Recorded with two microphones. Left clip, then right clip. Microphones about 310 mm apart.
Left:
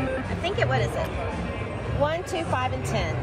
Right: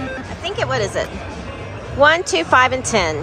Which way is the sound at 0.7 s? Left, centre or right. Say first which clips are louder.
Right 6 dB; centre.